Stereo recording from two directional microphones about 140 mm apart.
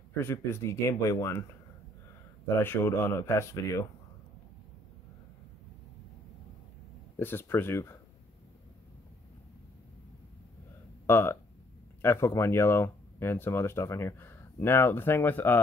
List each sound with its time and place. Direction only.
0.2 s speech: 20° left (ahead or behind)
2.4 s speech: 15° left (ahead or behind)
7.2 s speech: 15° left (ahead or behind)
11.1 s speech: 15° left (ahead or behind)